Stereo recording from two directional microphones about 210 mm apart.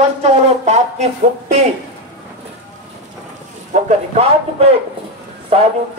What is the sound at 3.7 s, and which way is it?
A man's voice, 30° right (ahead or behind).